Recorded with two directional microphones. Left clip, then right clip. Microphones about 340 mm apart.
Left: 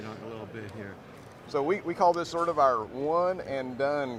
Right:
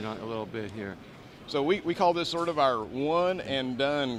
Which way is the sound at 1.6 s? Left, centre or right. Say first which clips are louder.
Even; right.